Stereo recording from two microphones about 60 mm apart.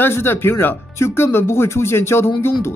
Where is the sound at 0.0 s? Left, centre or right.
Left.